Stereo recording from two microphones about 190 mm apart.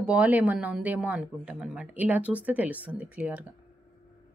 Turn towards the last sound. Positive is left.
turn(degrees=-5)  # may be behind; listen again after turning